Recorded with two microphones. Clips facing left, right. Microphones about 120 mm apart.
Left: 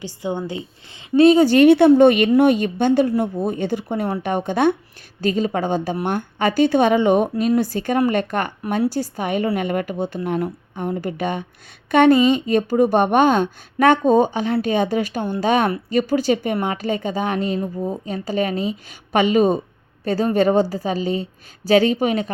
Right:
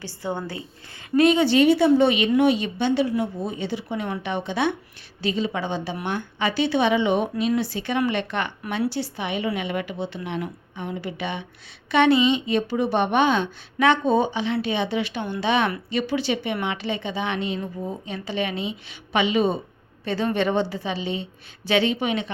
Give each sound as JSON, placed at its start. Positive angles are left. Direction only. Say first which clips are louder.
{"t": 0.0, "sound": "a woman's voice", "louder": "left 4 dB", "side_deg": 15}
{"t": 1.1, "sound": "a woman's voice", "louder": "left 6 dB", "side_deg": 35}
{"t": 1.5, "sound": "a woman's voice", "louder": "left 6 dB", "side_deg": 60}